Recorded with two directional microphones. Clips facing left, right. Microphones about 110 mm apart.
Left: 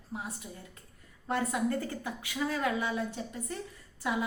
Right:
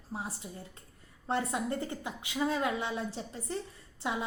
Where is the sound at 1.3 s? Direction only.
25° right (ahead or behind).